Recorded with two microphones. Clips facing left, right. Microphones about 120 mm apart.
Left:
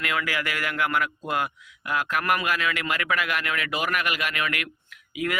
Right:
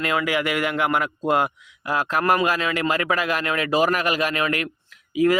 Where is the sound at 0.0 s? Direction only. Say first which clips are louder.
Right 6 dB; 25° right (ahead or behind).